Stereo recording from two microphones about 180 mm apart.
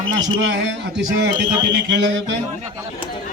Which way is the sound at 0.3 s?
90° right.